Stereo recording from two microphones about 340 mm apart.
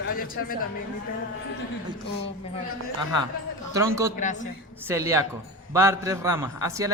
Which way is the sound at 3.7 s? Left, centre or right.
Centre.